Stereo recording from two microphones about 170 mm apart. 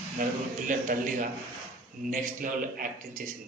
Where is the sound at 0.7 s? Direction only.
50° right (ahead or behind).